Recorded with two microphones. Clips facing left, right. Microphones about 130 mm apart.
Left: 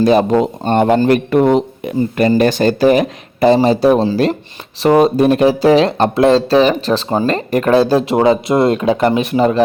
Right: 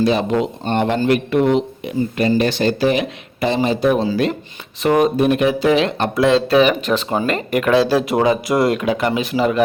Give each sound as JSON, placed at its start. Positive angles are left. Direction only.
{"t": 0.0, "sound": "speech", "side_deg": 45}
{"t": 8.0, "sound": "speech", "side_deg": 30}